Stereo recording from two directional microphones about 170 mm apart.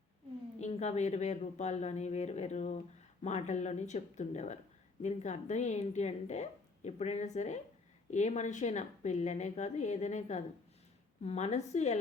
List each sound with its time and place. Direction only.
0.6 s a woman's voice: 40° left (ahead or behind)